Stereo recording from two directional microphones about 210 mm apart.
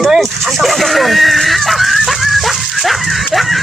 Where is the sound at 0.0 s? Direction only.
Centre (ahead or behind).